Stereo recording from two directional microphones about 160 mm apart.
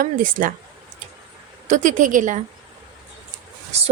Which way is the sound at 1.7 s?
50° right (ahead or behind).